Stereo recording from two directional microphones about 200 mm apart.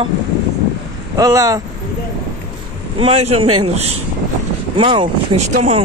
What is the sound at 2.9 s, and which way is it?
Speech, 30° right (ahead or behind).